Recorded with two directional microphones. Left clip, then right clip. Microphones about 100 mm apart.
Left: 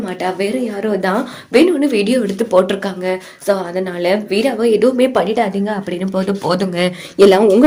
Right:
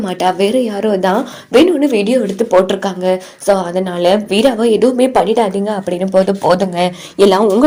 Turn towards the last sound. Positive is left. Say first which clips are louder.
# left 1 dB
turn(degrees=-5)  # may be behind; listen again after turning